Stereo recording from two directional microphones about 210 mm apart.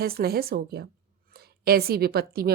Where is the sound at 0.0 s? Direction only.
45° right (ahead or behind).